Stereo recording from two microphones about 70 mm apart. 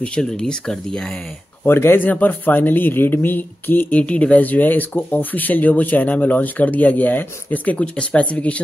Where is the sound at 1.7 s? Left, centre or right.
Left.